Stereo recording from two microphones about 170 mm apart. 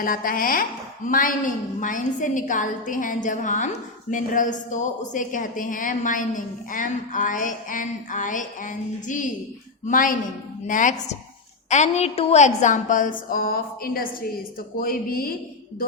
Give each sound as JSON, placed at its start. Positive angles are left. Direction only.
{"t": 0.0, "sound": "a woman's voice", "side_deg": 55}